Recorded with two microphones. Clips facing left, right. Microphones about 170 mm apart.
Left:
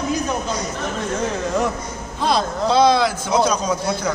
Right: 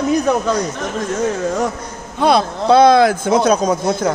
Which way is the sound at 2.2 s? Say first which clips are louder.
Right 5 dB; 60° right (ahead or behind).